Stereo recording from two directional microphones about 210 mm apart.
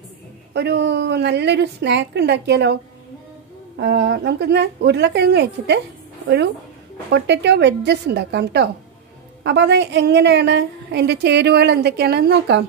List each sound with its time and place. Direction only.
0.5 s a woman's voice: 55° right (ahead or behind)